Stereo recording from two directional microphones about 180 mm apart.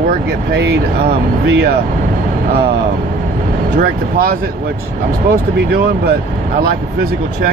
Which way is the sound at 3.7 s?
55° right (ahead or behind).